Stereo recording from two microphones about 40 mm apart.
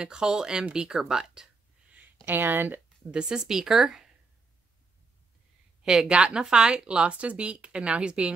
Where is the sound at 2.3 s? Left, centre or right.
Right.